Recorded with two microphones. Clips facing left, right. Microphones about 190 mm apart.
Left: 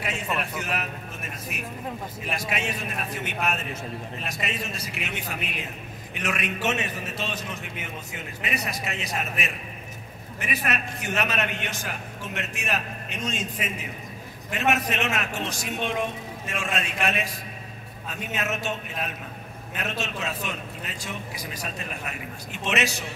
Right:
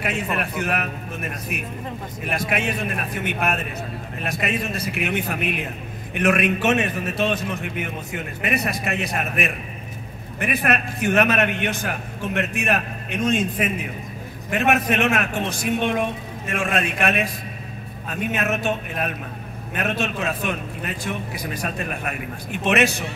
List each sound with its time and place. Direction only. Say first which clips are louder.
0.0 s a man's voice: right 4 dB; 60° right (ahead or behind)